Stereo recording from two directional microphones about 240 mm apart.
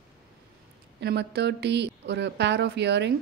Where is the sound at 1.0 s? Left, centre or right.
Right.